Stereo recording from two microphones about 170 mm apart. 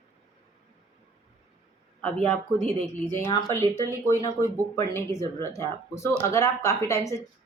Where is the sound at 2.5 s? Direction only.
40° right (ahead or behind).